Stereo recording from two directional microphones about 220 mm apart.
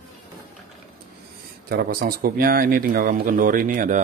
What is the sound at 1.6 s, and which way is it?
Speech, 40° right (ahead or behind).